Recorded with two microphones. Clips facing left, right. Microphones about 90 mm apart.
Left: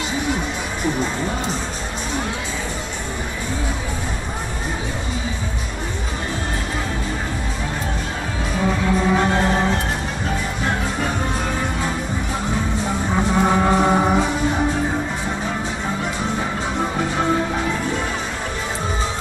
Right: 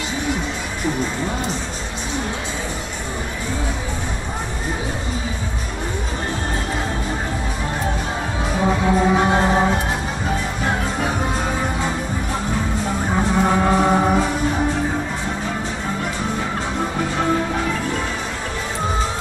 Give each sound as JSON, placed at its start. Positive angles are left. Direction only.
{"t": 8.6, "sound": "music", "side_deg": -20}
{"t": 13.1, "sound": "music", "side_deg": 5}